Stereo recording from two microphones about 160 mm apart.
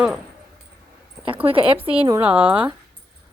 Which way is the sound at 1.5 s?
35° right (ahead or behind).